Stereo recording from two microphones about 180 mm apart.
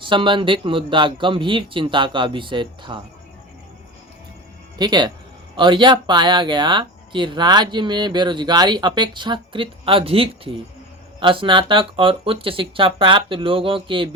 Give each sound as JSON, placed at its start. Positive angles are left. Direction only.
{"t": 0.0, "sound": "speech", "side_deg": -25}
{"t": 4.8, "sound": "speech", "side_deg": -25}